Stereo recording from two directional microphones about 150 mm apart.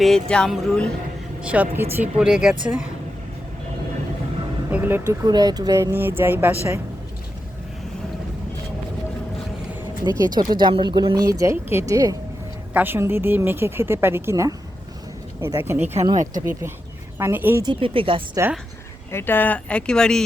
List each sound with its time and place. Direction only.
0.0 s speech: 5° left (ahead or behind)
1.4 s speech: 10° right (ahead or behind)
4.7 s speech: 10° right (ahead or behind)
10.1 s speech: 25° right (ahead or behind)
17.2 s speech: 15° right (ahead or behind)
17.6 s speech: 35° right (ahead or behind)
19.1 s speech: 15° left (ahead or behind)